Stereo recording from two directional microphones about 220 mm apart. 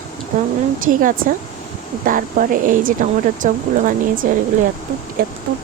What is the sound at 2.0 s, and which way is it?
Speech, 40° right (ahead or behind).